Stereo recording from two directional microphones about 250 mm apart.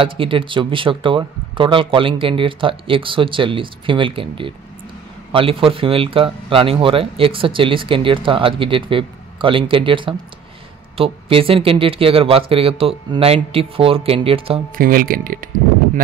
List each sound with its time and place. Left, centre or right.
0.0 s speech: right
14.8 s speech: right